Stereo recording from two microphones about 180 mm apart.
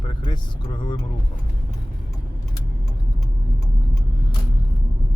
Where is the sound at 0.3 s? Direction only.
25° left (ahead or behind).